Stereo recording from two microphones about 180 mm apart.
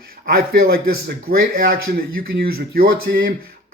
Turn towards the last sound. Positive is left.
turn(degrees=-55)  # may be behind; listen again after turning